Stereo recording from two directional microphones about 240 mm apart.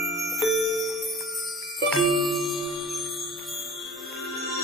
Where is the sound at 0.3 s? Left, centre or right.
Centre.